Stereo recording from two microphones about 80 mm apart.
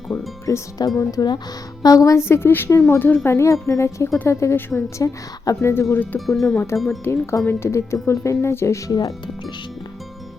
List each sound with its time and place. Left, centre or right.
0.1 s a woman's voice: left
0.9 s a woman's voice: left
3.2 s a woman's voice: left
5.6 s speech: left
6.1 s speech: centre
7.0 s speech: left